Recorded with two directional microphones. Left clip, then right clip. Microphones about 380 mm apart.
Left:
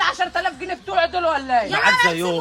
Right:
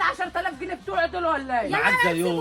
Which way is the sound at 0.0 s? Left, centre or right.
Left.